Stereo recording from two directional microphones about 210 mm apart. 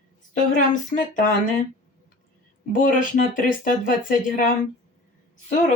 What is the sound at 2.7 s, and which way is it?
Speech, 40° left (ahead or behind).